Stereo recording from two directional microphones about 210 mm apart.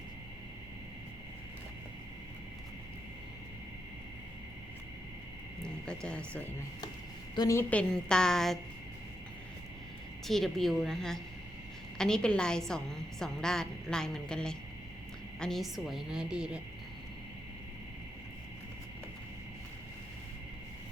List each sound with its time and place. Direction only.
5.6 s a woman's voice: 5° left (ahead or behind)
10.2 s a woman's voice: centre (ahead or behind)